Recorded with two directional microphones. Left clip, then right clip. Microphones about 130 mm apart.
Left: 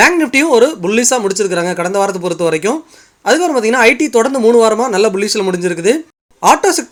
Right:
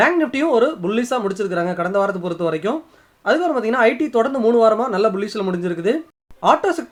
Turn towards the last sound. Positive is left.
turn(degrees=25)  # may be behind; listen again after turning